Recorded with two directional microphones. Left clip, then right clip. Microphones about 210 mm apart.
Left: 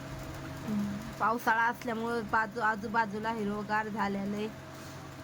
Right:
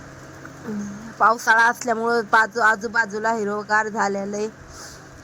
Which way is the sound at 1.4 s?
15° right (ahead or behind).